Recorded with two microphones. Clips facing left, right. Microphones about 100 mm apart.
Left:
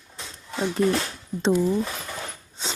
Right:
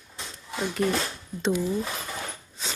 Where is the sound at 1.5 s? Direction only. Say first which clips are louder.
Left 5 dB; 40° left (ahead or behind).